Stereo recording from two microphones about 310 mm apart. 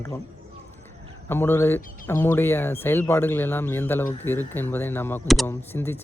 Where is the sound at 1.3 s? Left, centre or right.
Centre.